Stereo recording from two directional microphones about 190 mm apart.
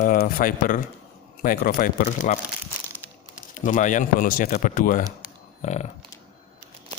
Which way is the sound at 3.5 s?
40° left (ahead or behind).